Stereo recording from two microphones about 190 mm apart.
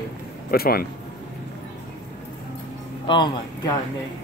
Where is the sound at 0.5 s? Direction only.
55° left (ahead or behind).